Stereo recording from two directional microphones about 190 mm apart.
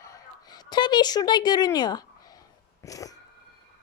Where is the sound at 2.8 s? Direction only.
20° left (ahead or behind).